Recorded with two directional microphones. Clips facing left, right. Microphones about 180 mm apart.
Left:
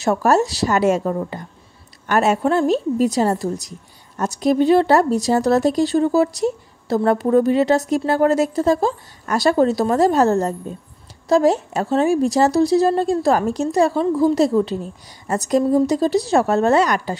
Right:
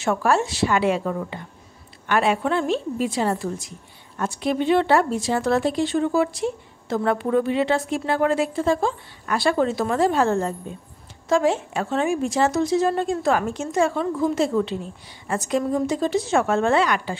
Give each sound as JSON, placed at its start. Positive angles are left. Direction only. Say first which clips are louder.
{"t": 0.0, "sound": "speech", "louder": "left 4 dB", "side_deg": 40}